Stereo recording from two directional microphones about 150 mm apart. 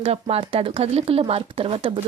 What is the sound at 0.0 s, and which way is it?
Speech, 40° right (ahead or behind).